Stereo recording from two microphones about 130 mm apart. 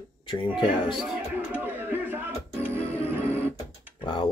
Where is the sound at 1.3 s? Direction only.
15° right (ahead or behind).